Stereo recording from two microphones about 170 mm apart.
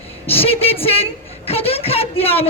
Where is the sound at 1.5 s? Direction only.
35° left (ahead or behind).